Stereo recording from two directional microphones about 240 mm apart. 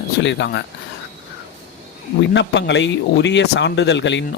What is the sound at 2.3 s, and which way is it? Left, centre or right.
Speech, left.